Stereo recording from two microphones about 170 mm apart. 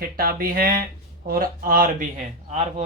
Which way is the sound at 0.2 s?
60° right (ahead or behind).